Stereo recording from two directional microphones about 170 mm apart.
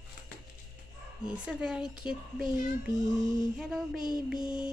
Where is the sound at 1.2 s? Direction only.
5° right (ahead or behind).